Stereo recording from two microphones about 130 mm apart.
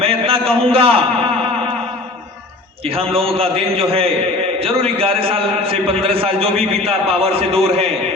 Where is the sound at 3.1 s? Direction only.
45° right (ahead or behind).